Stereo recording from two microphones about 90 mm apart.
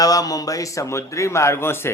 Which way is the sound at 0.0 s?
40° left (ahead or behind).